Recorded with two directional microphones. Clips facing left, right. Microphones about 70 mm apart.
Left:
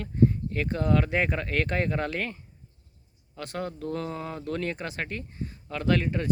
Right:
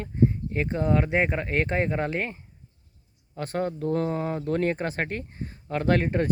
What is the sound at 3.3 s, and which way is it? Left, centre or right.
Speech, right.